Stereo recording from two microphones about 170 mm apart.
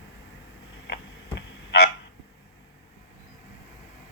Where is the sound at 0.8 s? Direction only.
90° left.